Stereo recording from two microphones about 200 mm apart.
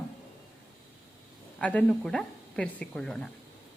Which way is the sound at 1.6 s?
5° left (ahead or behind).